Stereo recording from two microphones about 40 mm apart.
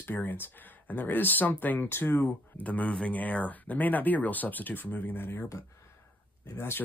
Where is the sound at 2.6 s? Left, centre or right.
Left.